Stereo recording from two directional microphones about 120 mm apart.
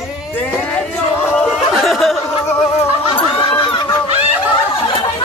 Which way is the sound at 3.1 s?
45° left (ahead or behind).